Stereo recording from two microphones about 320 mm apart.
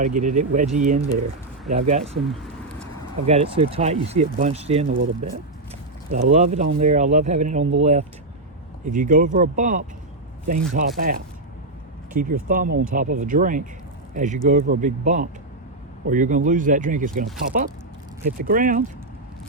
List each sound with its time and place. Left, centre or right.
0.0 s speech: right
3.2 s speech: centre